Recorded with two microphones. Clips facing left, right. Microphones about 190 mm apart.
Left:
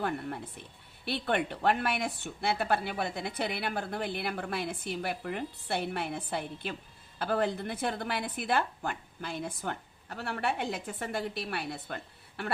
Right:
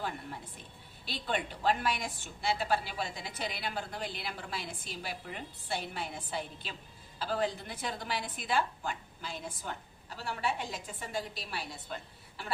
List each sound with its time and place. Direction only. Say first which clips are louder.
0.0 s speech: left 6 dB; 60° left (ahead or behind)